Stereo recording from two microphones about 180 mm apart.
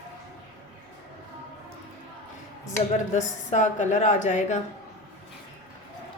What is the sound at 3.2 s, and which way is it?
A woman's voice, 40° left (ahead or behind).